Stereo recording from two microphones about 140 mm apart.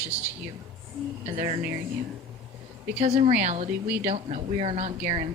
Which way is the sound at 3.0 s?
55° right (ahead or behind).